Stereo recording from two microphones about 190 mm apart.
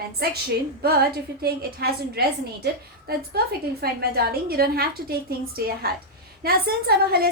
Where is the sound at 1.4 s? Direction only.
55° right (ahead or behind).